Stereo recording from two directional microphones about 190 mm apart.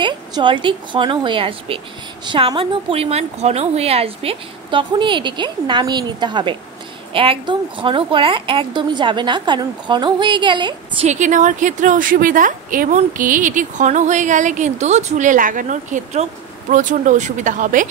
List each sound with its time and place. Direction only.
0.0 s a woman's voice: 25° right (ahead or behind)
11.1 s a woman's voice: 40° right (ahead or behind)